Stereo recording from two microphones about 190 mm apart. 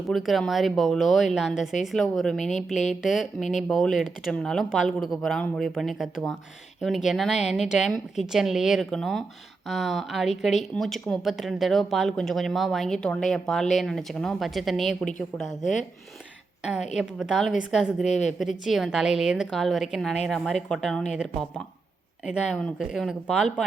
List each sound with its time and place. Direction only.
0.1 s speech: centre (ahead or behind)
15.6 s speech: 40° left (ahead or behind)
16.9 s speech: 5° right (ahead or behind)
18.0 s speech: 35° left (ahead or behind)
18.6 s speech: centre (ahead or behind)
22.3 s speech: 5° right (ahead or behind)